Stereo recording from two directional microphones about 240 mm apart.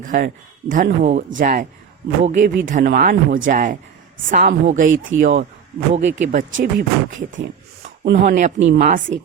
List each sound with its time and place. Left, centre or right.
0.0 s speech: right